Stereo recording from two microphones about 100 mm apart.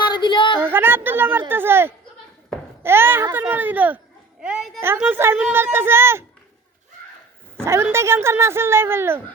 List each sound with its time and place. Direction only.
0.0 s a sound: 50° left (ahead or behind)
0.6 s a woman's voice: 20° right (ahead or behind)
4.4 s a child's voice: centre (ahead or behind)
4.9 s a woman's voice: 20° right (ahead or behind)
7.6 s a woman's voice: 25° right (ahead or behind)